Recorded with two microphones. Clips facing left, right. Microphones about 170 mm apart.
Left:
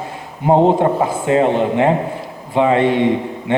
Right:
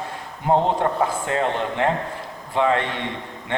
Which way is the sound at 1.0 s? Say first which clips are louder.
Left 7 dB; 15° left (ahead or behind).